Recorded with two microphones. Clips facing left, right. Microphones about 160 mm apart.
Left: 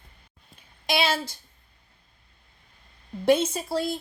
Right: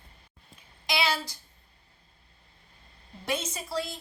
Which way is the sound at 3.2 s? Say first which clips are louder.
Left 11 dB; 30° left (ahead or behind).